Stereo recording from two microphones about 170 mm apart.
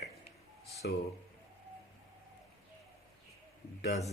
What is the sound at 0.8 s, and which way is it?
Speech, 70° left (ahead or behind).